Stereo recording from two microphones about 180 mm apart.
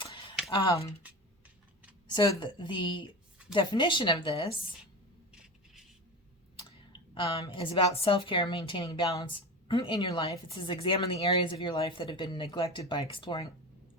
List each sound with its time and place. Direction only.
0.5 s speech: 35° left (ahead or behind)
2.1 s a woman's voice: 25° left (ahead or behind)
5.3 s a sound: 5° right (ahead or behind)
6.7 s clicking: 30° left (ahead or behind)
7.4 s a woman's voice: 25° left (ahead or behind)